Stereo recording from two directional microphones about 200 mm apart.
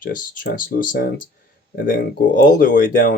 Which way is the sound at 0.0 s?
45° left (ahead or behind).